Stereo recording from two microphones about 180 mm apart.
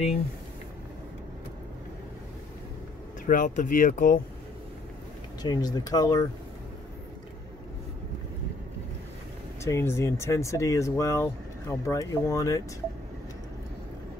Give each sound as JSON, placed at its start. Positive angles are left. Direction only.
{"t": 3.3, "sound": "speech", "side_deg": 45}
{"t": 5.4, "sound": "speech", "side_deg": 20}
{"t": 9.6, "sound": "speech", "side_deg": 15}